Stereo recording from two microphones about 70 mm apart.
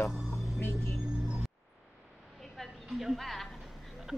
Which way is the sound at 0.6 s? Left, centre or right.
Left.